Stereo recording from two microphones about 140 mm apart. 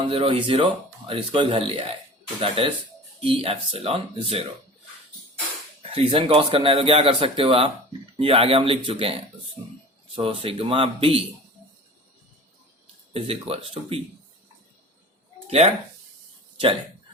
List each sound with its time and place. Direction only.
0.0 s a man's voice: 40° right (ahead or behind)
5.8 s a man's voice: 40° right (ahead or behind)
10.2 s speech: 40° right (ahead or behind)
13.1 s speech: 45° right (ahead or behind)
15.4 s speech: 50° right (ahead or behind)